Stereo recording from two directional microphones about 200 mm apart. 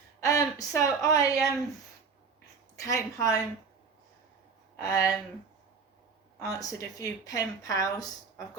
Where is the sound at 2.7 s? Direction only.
15° left (ahead or behind).